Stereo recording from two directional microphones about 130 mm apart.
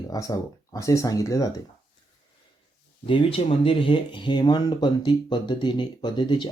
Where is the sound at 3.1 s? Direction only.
45° left (ahead or behind).